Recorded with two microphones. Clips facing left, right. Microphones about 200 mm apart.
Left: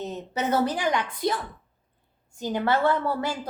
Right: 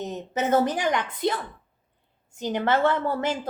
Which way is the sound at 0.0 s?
20° right (ahead or behind).